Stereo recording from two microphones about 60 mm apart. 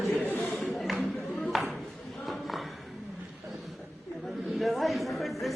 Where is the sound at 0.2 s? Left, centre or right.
Left.